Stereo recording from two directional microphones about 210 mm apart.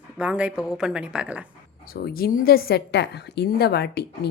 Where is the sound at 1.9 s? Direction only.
45° left (ahead or behind).